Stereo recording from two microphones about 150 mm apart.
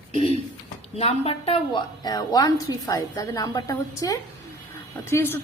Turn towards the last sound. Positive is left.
turn(degrees=15)  # may be behind; listen again after turning